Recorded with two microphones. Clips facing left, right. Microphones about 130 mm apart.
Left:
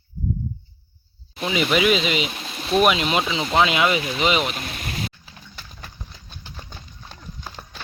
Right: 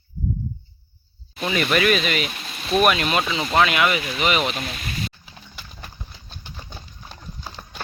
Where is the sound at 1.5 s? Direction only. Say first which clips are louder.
Left 1 dB; 15° left (ahead or behind).